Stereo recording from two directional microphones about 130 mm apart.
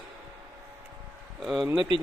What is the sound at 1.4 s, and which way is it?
Speech, 5° right (ahead or behind).